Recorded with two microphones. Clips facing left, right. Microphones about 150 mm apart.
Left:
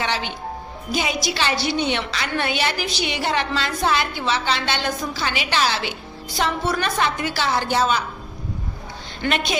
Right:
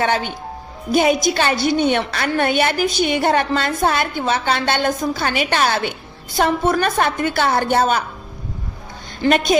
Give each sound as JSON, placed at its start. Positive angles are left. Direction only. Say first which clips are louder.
{"t": 0.0, "sound": "a woman's voice", "louder": "right 6 dB", "side_deg": -50}
{"t": 9.3, "sound": "a woman's voice", "louder": "right 8 dB", "side_deg": -45}